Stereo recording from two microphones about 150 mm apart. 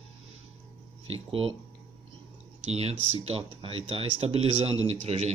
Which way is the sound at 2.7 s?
45° right (ahead or behind).